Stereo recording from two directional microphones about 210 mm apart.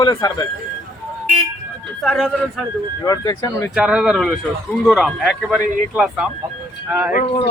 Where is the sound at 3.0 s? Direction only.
15° left (ahead or behind).